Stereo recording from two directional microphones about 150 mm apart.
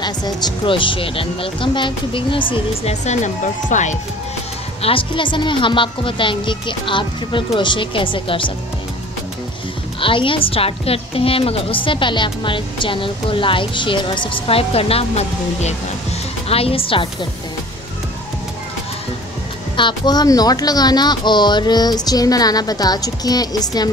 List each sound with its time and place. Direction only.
0.0 s a woman's voice: 30° left (ahead or behind)
2.5 s speech: 45° left (ahead or behind)
4.8 s a woman's voice: 35° left (ahead or behind)
9.9 s a woman's voice: 35° left (ahead or behind)
19.8 s speech: 30° left (ahead or behind)